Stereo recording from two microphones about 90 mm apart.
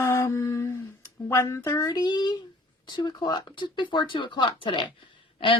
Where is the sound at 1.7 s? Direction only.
45° left (ahead or behind).